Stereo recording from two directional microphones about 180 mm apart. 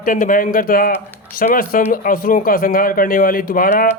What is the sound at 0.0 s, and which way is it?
Speech, 50° left (ahead or behind).